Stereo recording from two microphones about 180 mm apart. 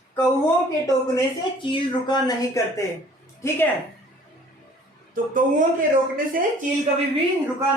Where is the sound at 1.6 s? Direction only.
25° left (ahead or behind).